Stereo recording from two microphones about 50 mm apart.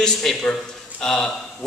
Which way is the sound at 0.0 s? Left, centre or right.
Centre.